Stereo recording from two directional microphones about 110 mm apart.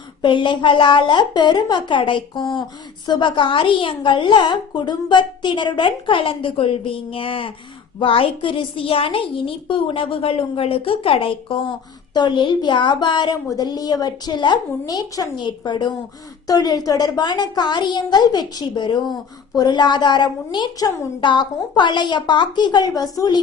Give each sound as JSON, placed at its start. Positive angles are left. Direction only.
{"t": 0.2, "sound": "a woman's voice", "side_deg": 45}